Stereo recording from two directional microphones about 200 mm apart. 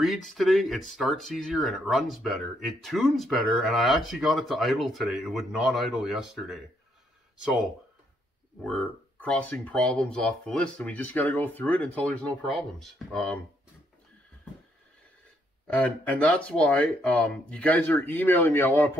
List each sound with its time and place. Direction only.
0.0 s speech: centre (ahead or behind)
8.6 s speech: 5° left (ahead or behind)
15.6 s speech: 5° left (ahead or behind)